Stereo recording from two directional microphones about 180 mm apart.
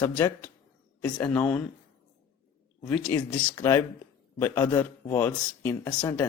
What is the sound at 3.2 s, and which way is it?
Speech, 20° left (ahead or behind).